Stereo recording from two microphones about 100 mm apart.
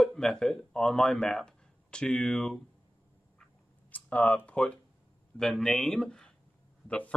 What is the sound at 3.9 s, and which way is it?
Speech, 15° left (ahead or behind).